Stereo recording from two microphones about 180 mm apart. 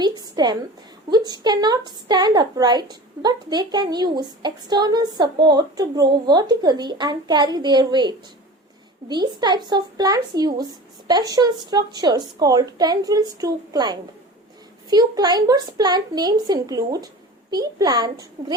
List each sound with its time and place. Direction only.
0.0 s a woman's voice: 25° right (ahead or behind)